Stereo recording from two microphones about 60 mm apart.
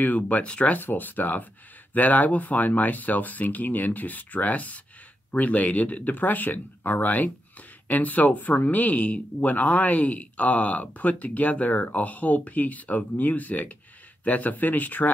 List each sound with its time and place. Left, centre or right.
0.0 s speech: left
0.7 s speech: left